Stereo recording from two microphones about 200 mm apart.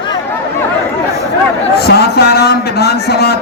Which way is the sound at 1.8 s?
55° left (ahead or behind).